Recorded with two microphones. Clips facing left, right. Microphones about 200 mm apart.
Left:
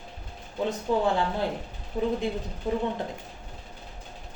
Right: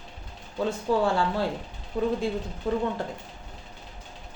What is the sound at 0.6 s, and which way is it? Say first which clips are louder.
Speech: right 1 dB; 20° left (ahead or behind).